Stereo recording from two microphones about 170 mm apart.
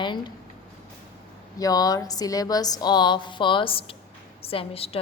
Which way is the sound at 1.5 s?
20° left (ahead or behind).